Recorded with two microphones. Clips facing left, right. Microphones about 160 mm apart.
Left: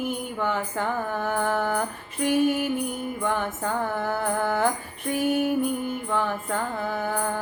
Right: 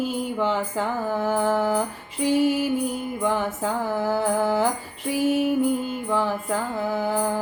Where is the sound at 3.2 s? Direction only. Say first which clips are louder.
Right 3 dB; 10° right (ahead or behind).